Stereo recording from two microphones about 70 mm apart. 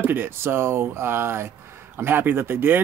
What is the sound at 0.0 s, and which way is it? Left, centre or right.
Speech, right.